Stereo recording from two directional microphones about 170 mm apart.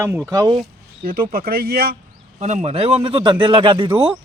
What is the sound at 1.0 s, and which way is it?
Speech, 60° right (ahead or behind).